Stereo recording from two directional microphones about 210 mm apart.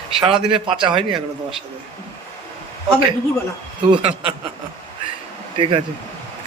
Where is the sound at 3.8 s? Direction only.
25° right (ahead or behind).